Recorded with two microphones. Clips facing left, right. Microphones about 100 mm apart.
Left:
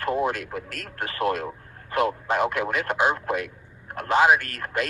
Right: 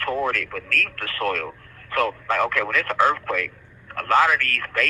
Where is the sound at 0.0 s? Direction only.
20° left (ahead or behind).